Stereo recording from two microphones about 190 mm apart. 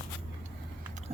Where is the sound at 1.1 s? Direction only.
30° right (ahead or behind).